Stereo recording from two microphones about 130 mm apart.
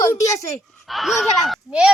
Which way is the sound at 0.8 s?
Centre (ahead or behind).